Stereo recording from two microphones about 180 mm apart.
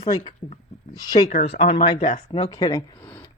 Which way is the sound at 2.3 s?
20° left (ahead or behind).